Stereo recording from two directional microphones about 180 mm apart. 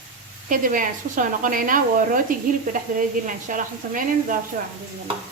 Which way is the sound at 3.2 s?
45° right (ahead or behind).